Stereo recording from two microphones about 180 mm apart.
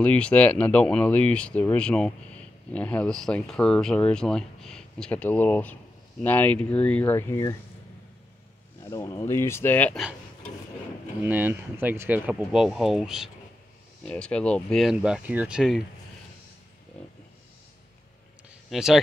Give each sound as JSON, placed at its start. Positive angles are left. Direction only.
{"t": 0.0, "sound": "speech", "side_deg": 5}
{"t": 8.8, "sound": "speech", "side_deg": 15}
{"t": 11.2, "sound": "speech", "side_deg": -10}
{"t": 18.7, "sound": "speech", "side_deg": -5}